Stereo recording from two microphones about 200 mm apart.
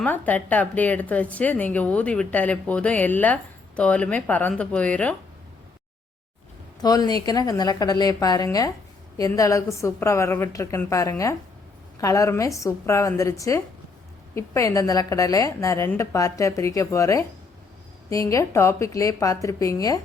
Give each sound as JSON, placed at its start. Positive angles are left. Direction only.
{"t": 0.0, "sound": "a woman's voice", "side_deg": 10}
{"t": 6.8, "sound": "a woman's voice", "side_deg": 20}